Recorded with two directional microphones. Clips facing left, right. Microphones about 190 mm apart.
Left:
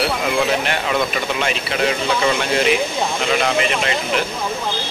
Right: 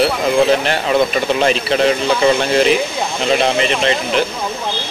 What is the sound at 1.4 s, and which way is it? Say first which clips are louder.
Speech: right 7 dB; 35° right (ahead or behind).